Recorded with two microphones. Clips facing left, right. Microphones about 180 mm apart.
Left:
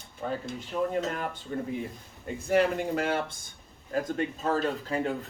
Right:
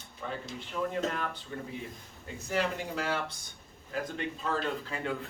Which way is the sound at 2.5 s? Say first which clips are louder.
Left 7 dB; 55° left (ahead or behind).